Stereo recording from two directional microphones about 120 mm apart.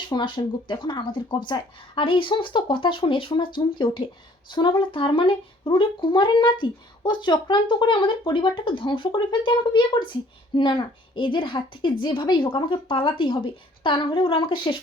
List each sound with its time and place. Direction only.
0.1 s speech: 40° left (ahead or behind)